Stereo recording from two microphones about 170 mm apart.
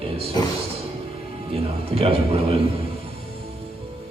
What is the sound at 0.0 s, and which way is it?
Music, 35° right (ahead or behind).